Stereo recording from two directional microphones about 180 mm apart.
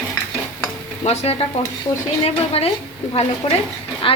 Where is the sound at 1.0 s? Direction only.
35° left (ahead or behind).